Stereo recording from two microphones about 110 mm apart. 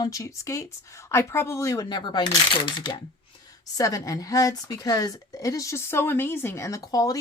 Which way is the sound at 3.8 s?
30° left (ahead or behind).